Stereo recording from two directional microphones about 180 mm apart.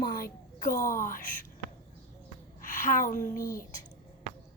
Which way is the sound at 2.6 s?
50° left (ahead or behind).